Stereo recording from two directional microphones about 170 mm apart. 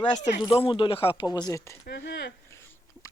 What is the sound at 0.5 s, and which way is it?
Speech, 30° left (ahead or behind).